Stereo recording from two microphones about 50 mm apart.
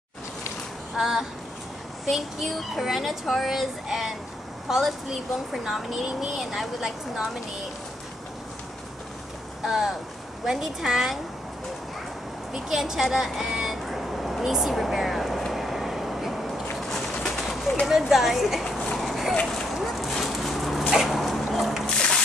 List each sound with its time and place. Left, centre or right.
0.9 s a child's voice: centre
9.6 s boat: centre
10.4 s speech: centre
12.5 s speech: centre
13.8 s vehicle: centre
17.1 s bird: centre
17.8 s a child's voice: centre
18.9 s dog: centre
21.8 s a sound: centre